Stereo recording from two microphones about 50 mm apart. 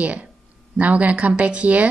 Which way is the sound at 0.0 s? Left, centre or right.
Right.